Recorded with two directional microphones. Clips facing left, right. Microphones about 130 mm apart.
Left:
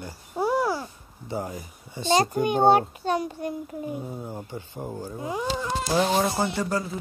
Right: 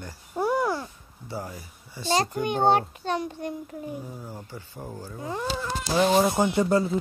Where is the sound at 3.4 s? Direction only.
15° left (ahead or behind).